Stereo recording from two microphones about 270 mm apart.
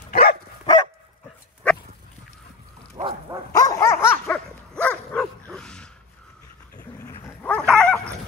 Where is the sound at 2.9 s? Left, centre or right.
Centre.